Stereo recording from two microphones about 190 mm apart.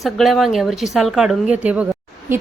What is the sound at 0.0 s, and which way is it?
A woman's voice, centre (ahead or behind).